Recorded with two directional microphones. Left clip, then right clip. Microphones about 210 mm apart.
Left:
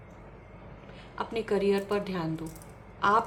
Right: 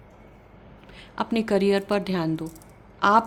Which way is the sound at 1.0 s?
55° right (ahead or behind).